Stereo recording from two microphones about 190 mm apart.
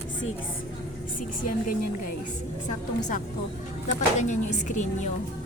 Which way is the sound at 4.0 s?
40° left (ahead or behind).